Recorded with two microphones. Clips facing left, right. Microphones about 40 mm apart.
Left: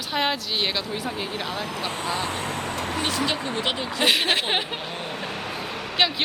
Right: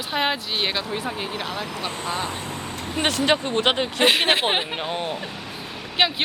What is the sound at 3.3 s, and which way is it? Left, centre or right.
Speech, right.